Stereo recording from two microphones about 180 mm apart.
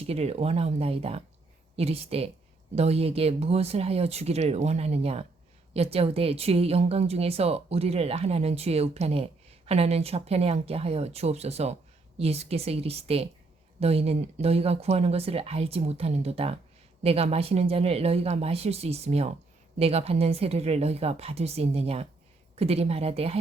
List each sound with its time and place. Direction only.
0.0 s speech: 35° right (ahead or behind)